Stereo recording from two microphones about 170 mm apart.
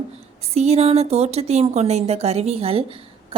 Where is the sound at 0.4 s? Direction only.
40° right (ahead or behind).